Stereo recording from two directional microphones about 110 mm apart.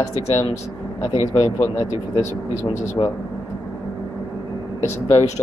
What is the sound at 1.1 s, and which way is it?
Speech, 50° left (ahead or behind).